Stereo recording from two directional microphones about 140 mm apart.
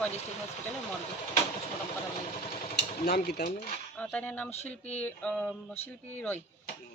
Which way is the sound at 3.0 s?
65° left (ahead or behind).